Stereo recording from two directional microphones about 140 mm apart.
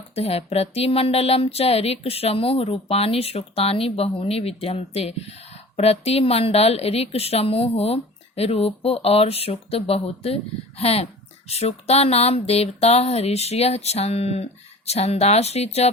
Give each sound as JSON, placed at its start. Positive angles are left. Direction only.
{"t": 0.1, "sound": "a woman's voice", "side_deg": 45}